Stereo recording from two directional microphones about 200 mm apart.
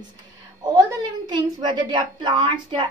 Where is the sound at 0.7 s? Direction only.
20° right (ahead or behind).